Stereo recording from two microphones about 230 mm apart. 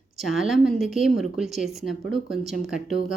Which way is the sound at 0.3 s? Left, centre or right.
Centre.